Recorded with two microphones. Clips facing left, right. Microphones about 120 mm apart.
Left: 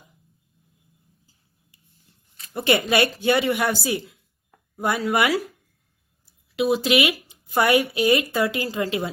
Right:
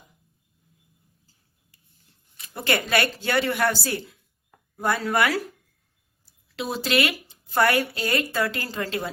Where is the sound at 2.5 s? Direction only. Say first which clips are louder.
Left 4 dB; 20° left (ahead or behind).